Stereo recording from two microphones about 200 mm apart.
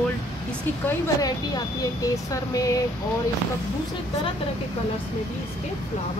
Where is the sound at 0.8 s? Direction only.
20° left (ahead or behind).